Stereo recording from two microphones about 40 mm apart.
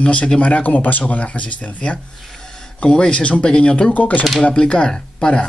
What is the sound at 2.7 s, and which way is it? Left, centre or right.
Speech, left.